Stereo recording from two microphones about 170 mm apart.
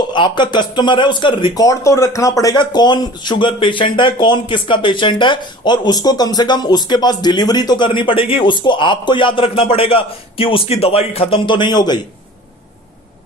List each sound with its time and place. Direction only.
0.1 s speech: 30° left (ahead or behind)